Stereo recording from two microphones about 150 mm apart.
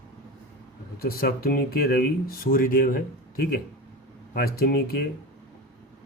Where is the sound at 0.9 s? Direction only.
90° left; by 3.4 s 70° left (ahead or behind).